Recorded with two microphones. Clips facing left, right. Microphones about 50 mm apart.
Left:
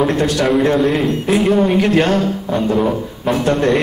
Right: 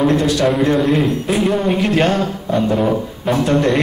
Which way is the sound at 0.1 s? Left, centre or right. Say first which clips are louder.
Right 1 dB; left.